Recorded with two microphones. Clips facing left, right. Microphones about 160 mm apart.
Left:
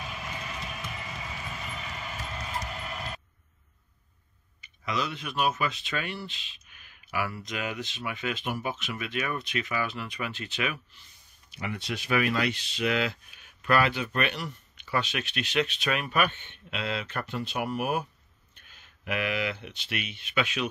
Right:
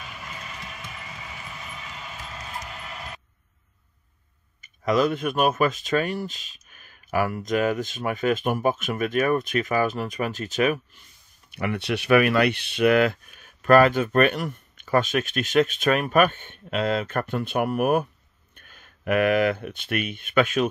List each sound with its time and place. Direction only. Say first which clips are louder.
4.6 s speech: right 10 dB; 45° right (ahead or behind)
11.5 s speech: right 8 dB; 65° right (ahead or behind)